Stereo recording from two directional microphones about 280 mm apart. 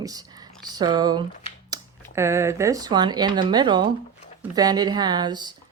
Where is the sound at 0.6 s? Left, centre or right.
Centre.